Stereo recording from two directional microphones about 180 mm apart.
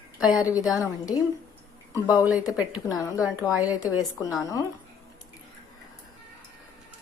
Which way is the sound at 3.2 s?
5° right (ahead or behind).